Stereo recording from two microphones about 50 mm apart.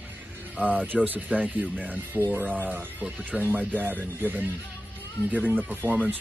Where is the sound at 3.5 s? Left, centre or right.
Right.